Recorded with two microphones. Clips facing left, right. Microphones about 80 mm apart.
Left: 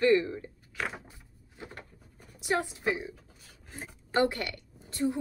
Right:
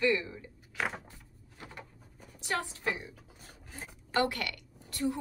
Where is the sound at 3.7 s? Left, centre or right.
Left.